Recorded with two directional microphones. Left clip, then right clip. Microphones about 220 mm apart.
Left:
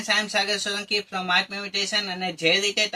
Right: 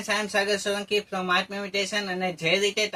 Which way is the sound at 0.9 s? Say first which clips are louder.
Left 1 dB; 20° right (ahead or behind).